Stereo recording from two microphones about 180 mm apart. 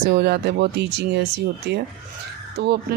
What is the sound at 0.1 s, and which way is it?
Speech, 65° right (ahead or behind).